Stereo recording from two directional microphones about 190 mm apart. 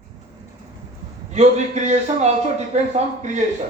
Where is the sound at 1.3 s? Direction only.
35° right (ahead or behind).